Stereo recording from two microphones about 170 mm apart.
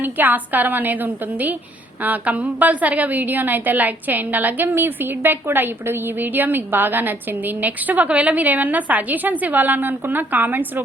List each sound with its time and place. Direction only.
0.0 s a woman's voice: 10° right (ahead or behind)